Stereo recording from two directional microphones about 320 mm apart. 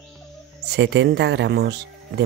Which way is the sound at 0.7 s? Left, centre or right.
Right.